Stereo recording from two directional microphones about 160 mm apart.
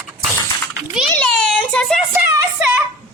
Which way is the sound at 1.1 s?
5° left (ahead or behind).